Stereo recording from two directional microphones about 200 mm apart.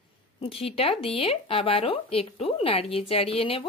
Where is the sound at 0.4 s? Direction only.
30° left (ahead or behind).